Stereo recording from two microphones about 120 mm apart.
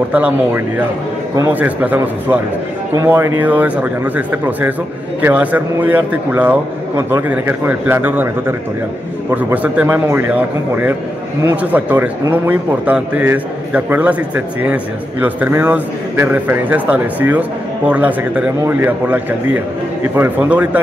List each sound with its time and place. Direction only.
1.5 s a man's voice: 15° right (ahead or behind)